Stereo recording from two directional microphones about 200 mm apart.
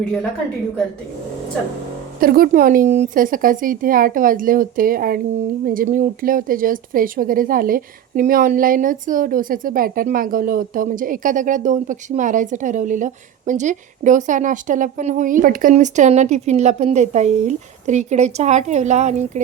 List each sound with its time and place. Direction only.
2.2 s a woman's voice: 45° right (ahead or behind)